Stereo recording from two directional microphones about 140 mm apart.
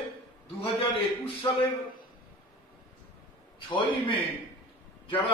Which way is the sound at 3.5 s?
40° left (ahead or behind).